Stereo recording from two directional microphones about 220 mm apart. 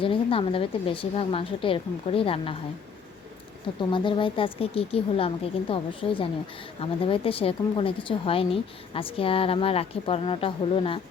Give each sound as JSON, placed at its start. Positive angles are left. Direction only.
{"t": 0.0, "sound": "a woman's voice", "side_deg": 25}
{"t": 3.8, "sound": "a woman's voice", "side_deg": 20}